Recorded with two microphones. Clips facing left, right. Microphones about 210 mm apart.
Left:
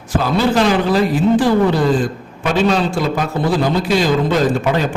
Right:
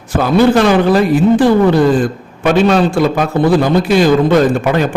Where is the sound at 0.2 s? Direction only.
55° right (ahead or behind).